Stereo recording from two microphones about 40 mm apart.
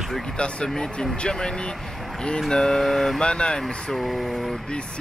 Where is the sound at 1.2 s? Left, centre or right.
Left.